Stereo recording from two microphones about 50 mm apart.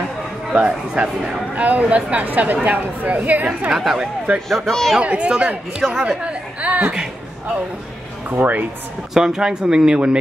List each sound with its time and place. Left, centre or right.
0.5 s a woman's voice: right
3.7 s speech: centre
4.5 s speech: centre
5.0 s speech: right
5.8 s speech: centre
6.0 s chatter: right
8.3 s a woman's voice: right
9.1 s speech: centre